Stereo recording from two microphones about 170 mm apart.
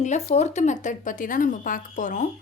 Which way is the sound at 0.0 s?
45° left (ahead or behind).